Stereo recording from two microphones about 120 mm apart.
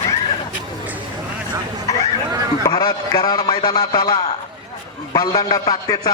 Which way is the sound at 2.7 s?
35° left (ahead or behind).